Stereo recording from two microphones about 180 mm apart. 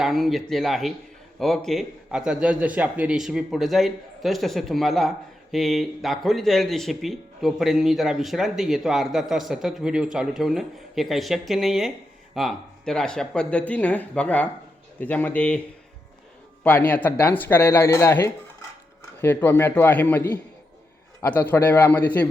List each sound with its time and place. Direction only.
0.0 s a man's voice: centre (ahead or behind)
16.6 s speech: 10° left (ahead or behind)